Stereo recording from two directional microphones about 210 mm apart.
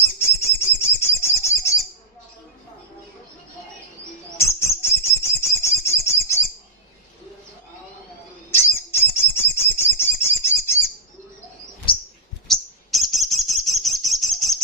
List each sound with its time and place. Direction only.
0.2 s bird: 10° left (ahead or behind)
4.4 s bird: 15° left (ahead or behind)
8.4 s bird: 10° left (ahead or behind)
11.9 s chirp: 25° left (ahead or behind)
12.5 s bird: centre (ahead or behind)